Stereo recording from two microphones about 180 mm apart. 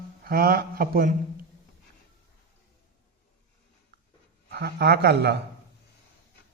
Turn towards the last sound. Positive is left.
turn(degrees=-65)  # may be behind; listen again after turning